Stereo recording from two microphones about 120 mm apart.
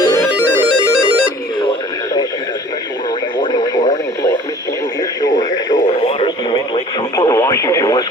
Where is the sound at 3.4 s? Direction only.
35° left (ahead or behind).